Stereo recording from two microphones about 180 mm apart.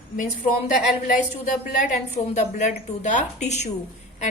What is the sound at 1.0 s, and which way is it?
A woman's voice, 45° left (ahead or behind).